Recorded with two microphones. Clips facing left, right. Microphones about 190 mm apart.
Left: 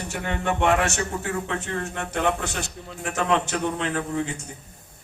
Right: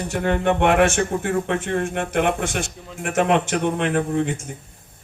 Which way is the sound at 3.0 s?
50° right (ahead or behind).